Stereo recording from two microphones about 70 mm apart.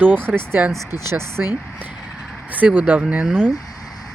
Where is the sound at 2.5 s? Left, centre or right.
Right.